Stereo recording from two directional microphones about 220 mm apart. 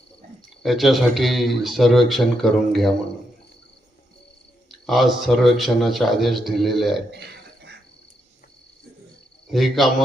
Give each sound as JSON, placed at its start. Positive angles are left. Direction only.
{"t": 0.6, "sound": "speech", "side_deg": 0}
{"t": 4.9, "sound": "speech", "side_deg": 0}
{"t": 7.1, "sound": "a sound", "side_deg": -50}
{"t": 9.5, "sound": "speech", "side_deg": 0}